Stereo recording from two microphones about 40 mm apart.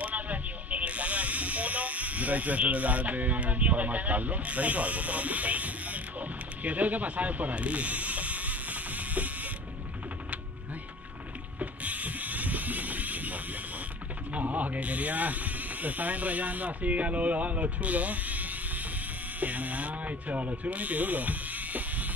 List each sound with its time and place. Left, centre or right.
0.0 s electric shaver: right
11.6 s a sound: right
14.3 s speech: right